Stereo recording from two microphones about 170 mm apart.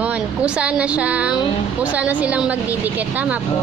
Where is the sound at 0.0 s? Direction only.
10° right (ahead or behind).